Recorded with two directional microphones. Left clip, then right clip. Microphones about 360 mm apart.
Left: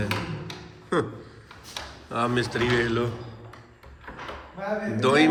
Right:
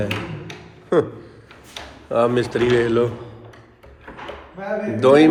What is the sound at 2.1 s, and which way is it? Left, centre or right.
Speech, centre.